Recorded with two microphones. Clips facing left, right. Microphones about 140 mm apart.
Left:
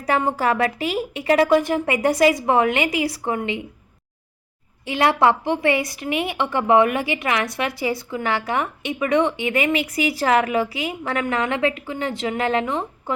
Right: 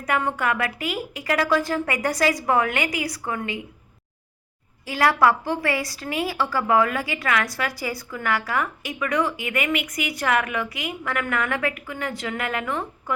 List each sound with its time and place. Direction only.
0.0 s a woman's voice: 30° left (ahead or behind)
4.9 s a woman's voice: 25° left (ahead or behind)